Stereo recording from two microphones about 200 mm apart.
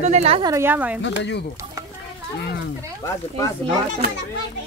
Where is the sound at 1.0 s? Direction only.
60° left (ahead or behind).